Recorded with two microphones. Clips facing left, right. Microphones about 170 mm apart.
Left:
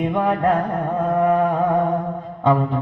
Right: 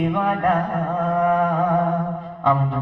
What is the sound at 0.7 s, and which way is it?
Carnatic music, 20° left (ahead or behind).